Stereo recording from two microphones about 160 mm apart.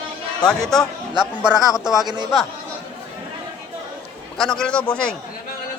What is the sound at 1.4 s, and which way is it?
Mantra, 5° right (ahead or behind).